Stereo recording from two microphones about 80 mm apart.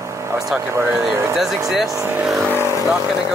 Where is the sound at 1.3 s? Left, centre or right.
Centre.